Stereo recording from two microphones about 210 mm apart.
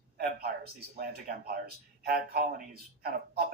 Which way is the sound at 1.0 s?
45° right (ahead or behind).